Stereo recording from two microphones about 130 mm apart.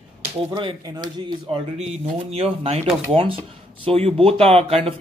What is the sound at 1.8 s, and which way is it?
Speech, 55° right (ahead or behind).